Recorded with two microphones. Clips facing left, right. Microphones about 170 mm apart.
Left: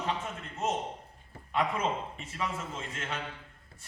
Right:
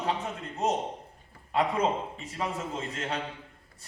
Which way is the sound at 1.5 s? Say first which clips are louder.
Right 4 dB; 35° right (ahead or behind).